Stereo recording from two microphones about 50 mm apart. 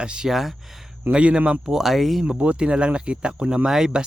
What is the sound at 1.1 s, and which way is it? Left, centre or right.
Speech, right.